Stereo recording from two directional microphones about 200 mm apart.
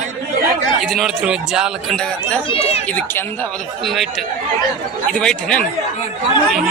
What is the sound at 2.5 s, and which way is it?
Speech, 30° left (ahead or behind).